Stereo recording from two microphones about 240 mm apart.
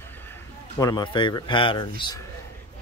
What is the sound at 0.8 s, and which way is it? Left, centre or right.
Speech, centre.